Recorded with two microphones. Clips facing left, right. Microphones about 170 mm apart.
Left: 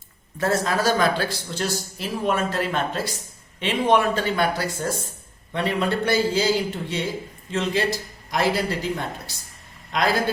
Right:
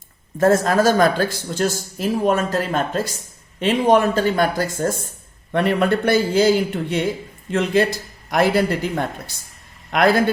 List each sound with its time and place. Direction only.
0.3 s speech: 45° right (ahead or behind)
5.5 s a man's voice: 55° right (ahead or behind)
7.5 s a man's voice: 55° right (ahead or behind)